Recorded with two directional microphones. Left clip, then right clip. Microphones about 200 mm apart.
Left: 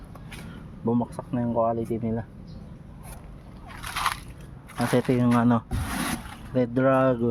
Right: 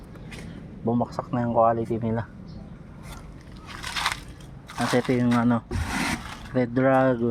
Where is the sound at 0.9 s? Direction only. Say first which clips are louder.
Right 1 dB; 15° left (ahead or behind).